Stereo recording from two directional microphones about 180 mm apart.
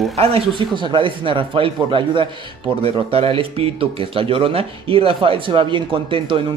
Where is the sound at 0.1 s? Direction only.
35° right (ahead or behind).